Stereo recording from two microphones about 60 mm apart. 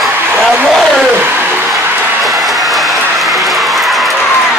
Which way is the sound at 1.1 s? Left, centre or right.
Right.